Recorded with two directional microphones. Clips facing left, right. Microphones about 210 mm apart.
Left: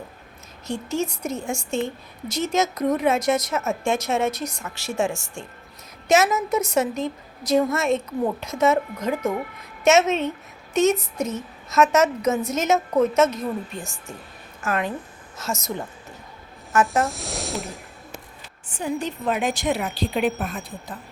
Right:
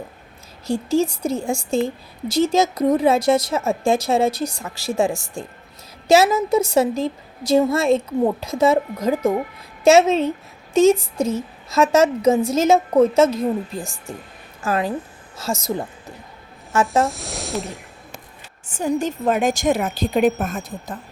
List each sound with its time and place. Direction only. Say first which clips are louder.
0.7 s a woman's voice: right 7 dB; 30° right (ahead or behind)
17.1 s speech: right 2 dB; centre (ahead or behind)
18.7 s a woman's voice: right 5 dB; 45° right (ahead or behind)